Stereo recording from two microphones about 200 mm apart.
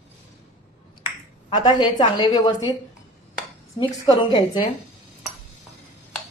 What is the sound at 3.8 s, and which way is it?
Speech, 20° left (ahead or behind).